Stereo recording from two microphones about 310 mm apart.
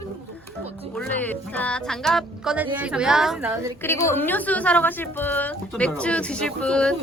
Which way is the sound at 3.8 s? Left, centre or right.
Centre.